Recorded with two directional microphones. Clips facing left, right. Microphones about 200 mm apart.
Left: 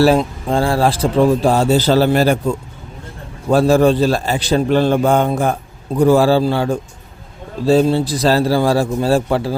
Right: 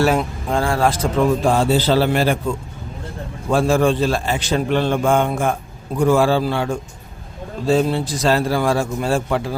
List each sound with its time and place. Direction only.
0.0 s a man's voice: 30° left (ahead or behind)
3.5 s a man's voice: 40° left (ahead or behind)